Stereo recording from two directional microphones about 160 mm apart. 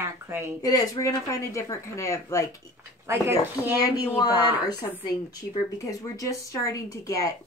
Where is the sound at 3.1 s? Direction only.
15° right (ahead or behind).